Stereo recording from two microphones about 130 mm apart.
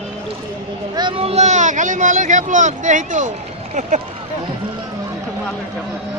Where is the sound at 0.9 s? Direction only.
35° right (ahead or behind).